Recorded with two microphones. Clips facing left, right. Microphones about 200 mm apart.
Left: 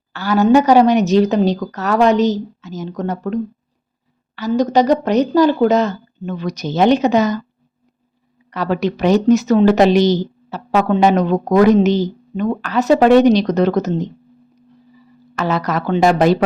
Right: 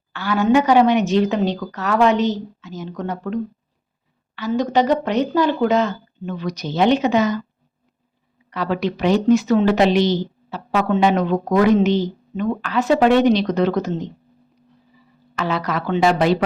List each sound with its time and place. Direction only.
0.1 s speech: 40° left (ahead or behind)
4.4 s speech: 40° left (ahead or behind)
8.4 s speech: 40° left (ahead or behind)
15.4 s speech: 45° left (ahead or behind)